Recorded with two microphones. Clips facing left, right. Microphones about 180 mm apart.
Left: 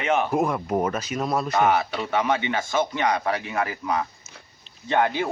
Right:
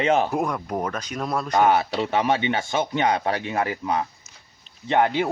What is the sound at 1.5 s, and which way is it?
A man's voice, 30° right (ahead or behind).